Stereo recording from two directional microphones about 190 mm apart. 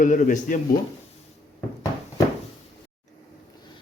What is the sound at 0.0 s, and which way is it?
Speech, 45° left (ahead or behind).